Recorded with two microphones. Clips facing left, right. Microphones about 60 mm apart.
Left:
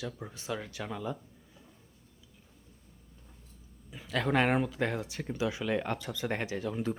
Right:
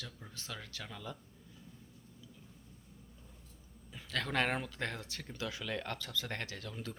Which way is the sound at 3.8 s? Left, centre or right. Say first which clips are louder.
Left 7 dB; centre.